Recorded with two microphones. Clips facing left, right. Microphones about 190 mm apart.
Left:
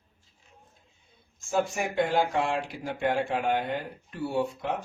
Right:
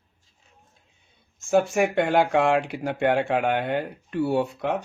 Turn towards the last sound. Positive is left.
turn(degrees=-70)  # may be behind; listen again after turning